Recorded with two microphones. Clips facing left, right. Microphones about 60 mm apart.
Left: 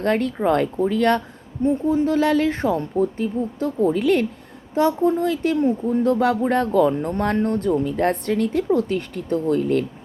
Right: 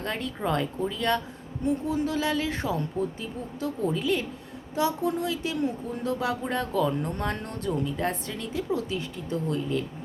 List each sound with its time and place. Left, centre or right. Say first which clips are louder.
0.0 s speech: left 10 dB; left
1.6 s speech: left 8 dB; left
4.0 s speech: left 9 dB; left
4.7 s speech: left 8 dB; left
5.5 s speech: left 10 dB; left